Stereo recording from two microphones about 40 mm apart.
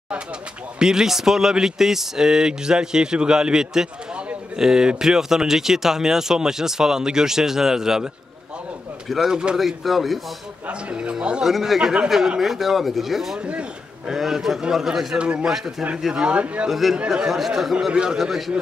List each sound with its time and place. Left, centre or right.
0.7 s speech: centre
9.1 s speech: centre
10.7 s speech: right
11.4 s speech: centre
11.8 s speech: right
12.4 s speech: centre
13.4 s a man's voice: right
14.0 s speech: centre
15.1 s speech: right
15.4 s speech: centre
16.6 s speech: centre
17.7 s speech: right